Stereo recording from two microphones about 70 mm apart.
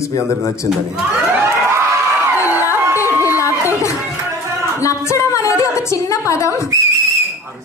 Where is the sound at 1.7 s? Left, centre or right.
Right.